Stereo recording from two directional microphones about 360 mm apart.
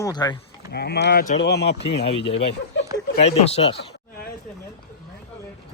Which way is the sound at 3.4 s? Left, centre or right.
Centre.